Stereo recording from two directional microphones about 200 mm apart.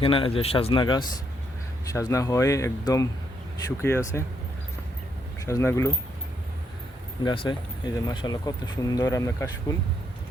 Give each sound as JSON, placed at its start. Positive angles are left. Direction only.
{"t": 0.0, "sound": "speech", "side_deg": 25}
{"t": 5.5, "sound": "speech", "side_deg": 15}
{"t": 7.3, "sound": "speech", "side_deg": 20}